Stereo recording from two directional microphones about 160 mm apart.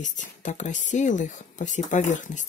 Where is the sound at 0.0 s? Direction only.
50° left (ahead or behind).